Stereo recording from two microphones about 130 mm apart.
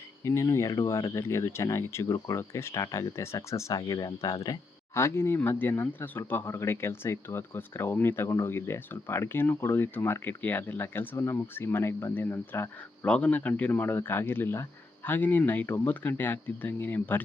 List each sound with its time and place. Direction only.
0.3 s speech: 20° left (ahead or behind)
13.1 s speech: 10° left (ahead or behind)